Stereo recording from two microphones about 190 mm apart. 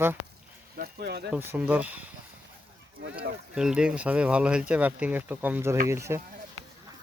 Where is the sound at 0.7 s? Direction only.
55° right (ahead or behind).